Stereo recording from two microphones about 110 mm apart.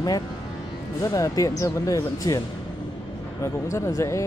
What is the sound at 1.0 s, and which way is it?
Speech, 30° left (ahead or behind).